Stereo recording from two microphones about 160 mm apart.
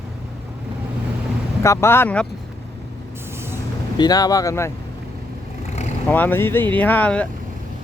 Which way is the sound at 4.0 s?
25° left (ahead or behind).